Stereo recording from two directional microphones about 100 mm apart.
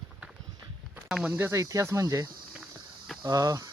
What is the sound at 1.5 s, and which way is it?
Speech, 35° right (ahead or behind).